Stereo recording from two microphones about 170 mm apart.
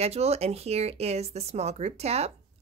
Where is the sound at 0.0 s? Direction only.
40° right (ahead or behind).